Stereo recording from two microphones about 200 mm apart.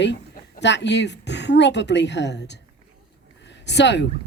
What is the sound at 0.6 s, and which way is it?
Speech, 60° left (ahead or behind).